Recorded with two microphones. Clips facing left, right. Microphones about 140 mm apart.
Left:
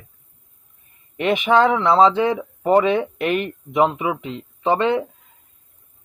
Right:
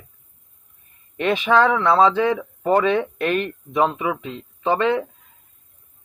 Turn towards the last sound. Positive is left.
turn(degrees=20)  # may be behind; listen again after turning